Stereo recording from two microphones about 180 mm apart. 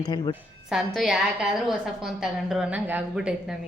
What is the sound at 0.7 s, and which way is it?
Speech, centre (ahead or behind).